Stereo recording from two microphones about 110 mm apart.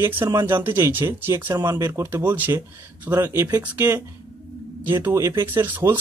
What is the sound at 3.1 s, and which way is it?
Speech, 30° right (ahead or behind).